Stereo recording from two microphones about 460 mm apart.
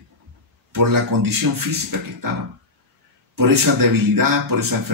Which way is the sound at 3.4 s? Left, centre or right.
Right.